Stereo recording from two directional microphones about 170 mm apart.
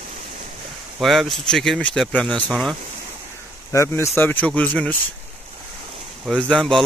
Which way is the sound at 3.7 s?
15° left (ahead or behind).